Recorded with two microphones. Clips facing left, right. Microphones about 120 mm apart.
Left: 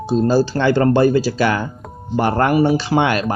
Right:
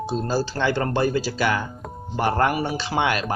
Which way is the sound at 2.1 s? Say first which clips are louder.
Left 5 dB; 65° left (ahead or behind).